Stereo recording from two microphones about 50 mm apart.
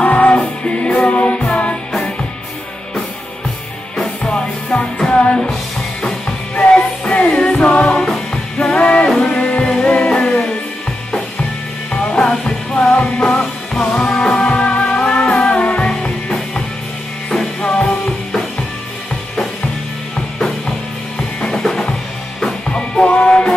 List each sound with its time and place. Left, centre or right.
0.0 s music: left
4.2 s music: left
8.1 s music: centre
8.7 s music: left
11.9 s music: centre
14.3 s music: centre
17.6 s music: left
21.4 s drum kit: centre
22.7 s music: centre